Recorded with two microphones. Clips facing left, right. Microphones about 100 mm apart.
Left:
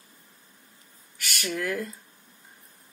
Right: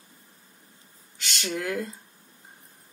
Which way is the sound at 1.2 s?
25° right (ahead or behind).